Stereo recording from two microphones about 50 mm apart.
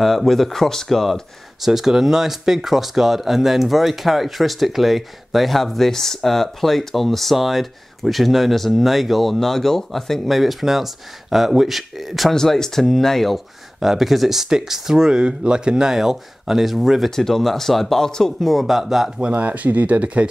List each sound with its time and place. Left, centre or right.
0.0 s speech: centre
12.4 s speech: centre
17.1 s speech: centre
18.5 s speech: centre
19.3 s speech: right